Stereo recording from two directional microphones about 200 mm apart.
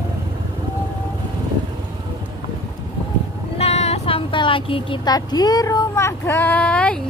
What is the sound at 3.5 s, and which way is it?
Speech, 30° left (ahead or behind).